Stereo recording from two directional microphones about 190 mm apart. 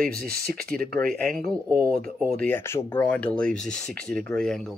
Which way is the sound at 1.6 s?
15° right (ahead or behind).